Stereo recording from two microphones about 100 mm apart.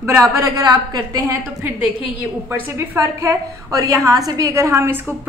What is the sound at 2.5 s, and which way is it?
A woman's voice, 30° right (ahead or behind).